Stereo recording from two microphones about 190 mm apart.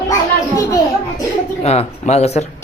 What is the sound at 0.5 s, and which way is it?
Speech, 20° left (ahead or behind).